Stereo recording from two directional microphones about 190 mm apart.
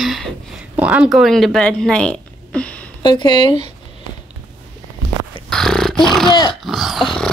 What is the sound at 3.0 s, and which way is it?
Speech, 25° left (ahead or behind).